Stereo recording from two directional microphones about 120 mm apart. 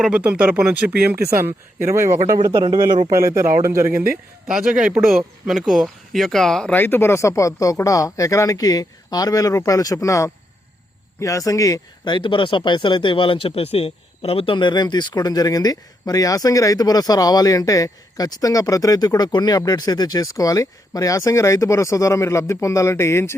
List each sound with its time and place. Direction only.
0.0 s speech: 5° right (ahead or behind); by 3.0 s 35° right (ahead or behind)
3.2 s speech: 25° right (ahead or behind)
4.4 s speech: 5° right (ahead or behind)
6.7 s speech: 20° left (ahead or behind)
12.1 s speech: 45° left (ahead or behind); by 23.3 s 20° left (ahead or behind)